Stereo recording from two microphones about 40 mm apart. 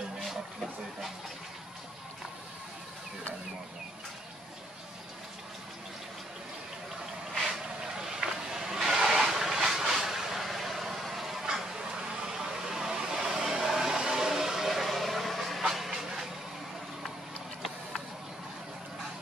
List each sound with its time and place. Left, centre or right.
7.5 s vehicle: centre